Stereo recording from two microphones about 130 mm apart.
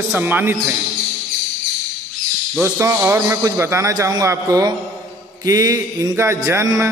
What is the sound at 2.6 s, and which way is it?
A man's voice, 20° right (ahead or behind).